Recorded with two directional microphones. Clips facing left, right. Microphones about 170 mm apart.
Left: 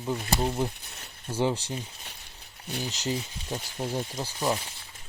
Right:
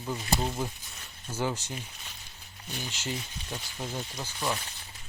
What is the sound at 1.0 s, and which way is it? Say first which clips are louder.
Speech: left 5 dB; 30° left (ahead or behind).